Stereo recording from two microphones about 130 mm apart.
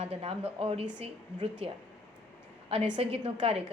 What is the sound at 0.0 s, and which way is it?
A woman's voice, 50° right (ahead or behind).